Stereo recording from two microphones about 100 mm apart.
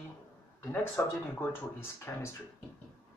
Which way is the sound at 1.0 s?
20° left (ahead or behind).